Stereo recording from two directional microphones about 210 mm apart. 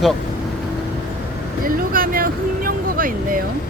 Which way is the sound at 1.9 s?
40° right (ahead or behind).